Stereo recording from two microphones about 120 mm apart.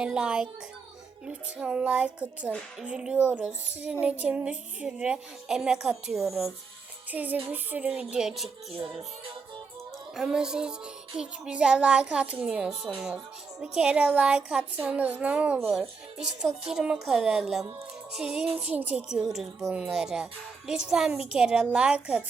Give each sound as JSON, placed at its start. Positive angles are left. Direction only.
{"t": 0.0, "sound": "speech", "side_deg": -5}
{"t": 7.1, "sound": "a woman's voice", "side_deg": -15}
{"t": 10.2, "sound": "a woman's voice", "side_deg": -5}